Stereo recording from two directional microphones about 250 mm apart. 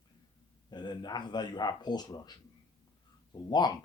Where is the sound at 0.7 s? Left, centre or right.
Centre.